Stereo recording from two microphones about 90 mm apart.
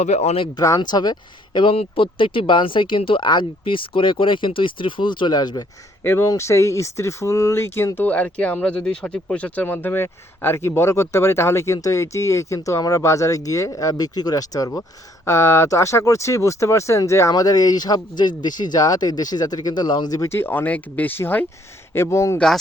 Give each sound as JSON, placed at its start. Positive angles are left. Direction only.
{"t": 0.5, "sound": "speech", "side_deg": 40}
{"t": 0.8, "sound": "speech", "side_deg": 50}
{"t": 1.5, "sound": "speech", "side_deg": 80}
{"t": 6.0, "sound": "speech", "side_deg": 25}
{"t": 7.9, "sound": "speech", "side_deg": 15}
{"t": 14.7, "sound": "speech", "side_deg": 20}
{"t": 15.3, "sound": "speech", "side_deg": 35}
{"t": 20.2, "sound": "speech", "side_deg": 25}